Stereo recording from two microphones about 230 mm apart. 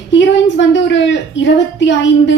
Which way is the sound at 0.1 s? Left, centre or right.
Left.